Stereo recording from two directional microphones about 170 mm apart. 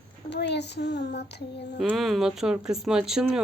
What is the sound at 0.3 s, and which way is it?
Child singing, 90° left.